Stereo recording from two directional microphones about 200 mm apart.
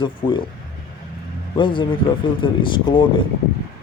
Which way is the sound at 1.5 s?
25° left (ahead or behind).